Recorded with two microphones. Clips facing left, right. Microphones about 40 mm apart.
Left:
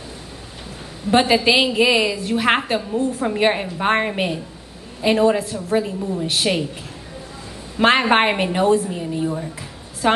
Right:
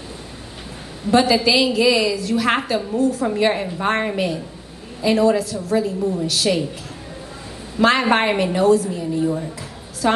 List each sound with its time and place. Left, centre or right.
1.1 s a woman's voice: left
7.8 s a woman's voice: left
9.2 s speech: centre
10.0 s a woman's voice: left